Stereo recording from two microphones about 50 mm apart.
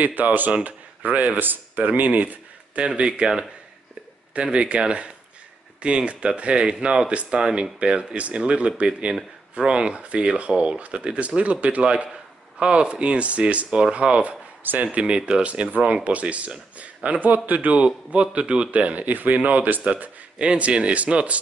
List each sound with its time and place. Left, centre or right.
0.0 s speech: right
3.0 s speech: centre
14.6 s speech: right
14.9 s speech: right